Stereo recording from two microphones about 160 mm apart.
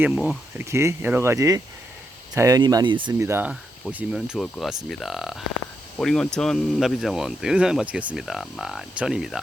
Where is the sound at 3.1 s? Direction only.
15° right (ahead or behind).